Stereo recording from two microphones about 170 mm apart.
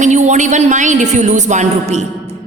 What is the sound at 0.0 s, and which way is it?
A woman's voice, 45° right (ahead or behind).